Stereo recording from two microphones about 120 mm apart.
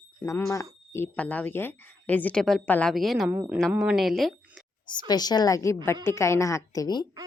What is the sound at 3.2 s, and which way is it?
Speech, 20° right (ahead or behind).